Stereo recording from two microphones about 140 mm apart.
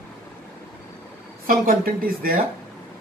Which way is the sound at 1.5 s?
90° right.